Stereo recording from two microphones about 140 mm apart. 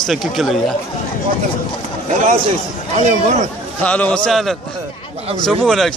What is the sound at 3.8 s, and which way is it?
Speech, 10° left (ahead or behind).